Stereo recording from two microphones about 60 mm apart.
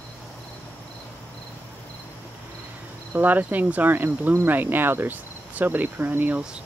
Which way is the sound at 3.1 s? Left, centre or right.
Right.